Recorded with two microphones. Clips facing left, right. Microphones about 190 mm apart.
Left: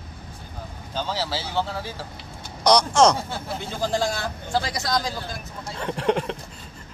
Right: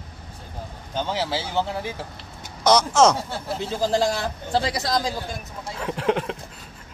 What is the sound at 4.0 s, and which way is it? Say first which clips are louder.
A man's voice: right 3 dB; 35° right (ahead or behind).